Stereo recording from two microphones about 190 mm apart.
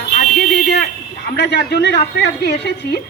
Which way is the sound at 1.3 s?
60° left (ahead or behind).